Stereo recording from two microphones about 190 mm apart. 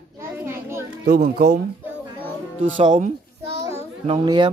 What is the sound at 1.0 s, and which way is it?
Speech, 55° right (ahead or behind).